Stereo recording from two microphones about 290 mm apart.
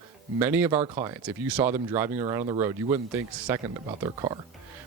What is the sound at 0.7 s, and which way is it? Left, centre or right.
Speech, right.